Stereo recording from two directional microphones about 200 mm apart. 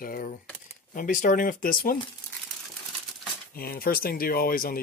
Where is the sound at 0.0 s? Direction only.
45° left (ahead or behind).